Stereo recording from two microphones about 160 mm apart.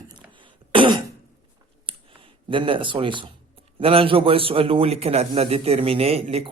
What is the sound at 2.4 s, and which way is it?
A man's voice, 35° right (ahead or behind).